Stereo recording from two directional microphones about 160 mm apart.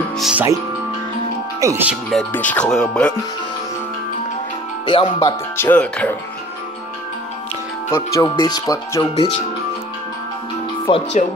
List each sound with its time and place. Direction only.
0.2 s speech: 5° right (ahead or behind)
1.6 s speech: 20° right (ahead or behind)
1.9 s speech: centre (ahead or behind)
4.8 s speech: 30° left (ahead or behind)
5.6 s speech: 10° left (ahead or behind)
7.9 s speech: 20° left (ahead or behind)
10.9 s speech: 30° left (ahead or behind)